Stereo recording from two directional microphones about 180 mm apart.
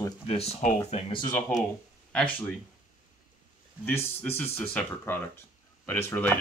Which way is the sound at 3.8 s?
10° left (ahead or behind).